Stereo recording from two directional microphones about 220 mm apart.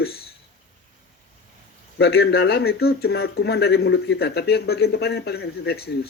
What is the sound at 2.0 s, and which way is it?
Speech, 45° left (ahead or behind).